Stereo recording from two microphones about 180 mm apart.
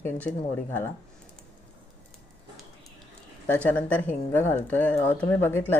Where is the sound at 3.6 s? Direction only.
10° left (ahead or behind).